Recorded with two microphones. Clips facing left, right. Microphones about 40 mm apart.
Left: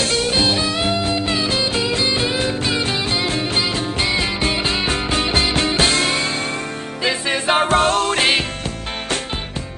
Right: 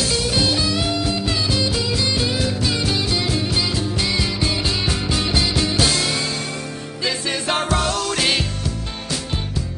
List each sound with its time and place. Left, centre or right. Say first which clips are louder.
0.0 s music: left 2 dB; left
4.1 s music: left 2 dB; left
7.0 s music: left 3 dB; left
7.6 s music: left 5 dB; left